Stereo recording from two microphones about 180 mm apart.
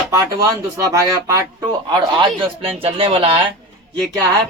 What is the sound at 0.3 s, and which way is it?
Speech, 20° right (ahead or behind).